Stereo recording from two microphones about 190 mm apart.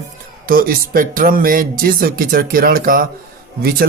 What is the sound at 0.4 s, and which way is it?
Speech, 50° right (ahead or behind).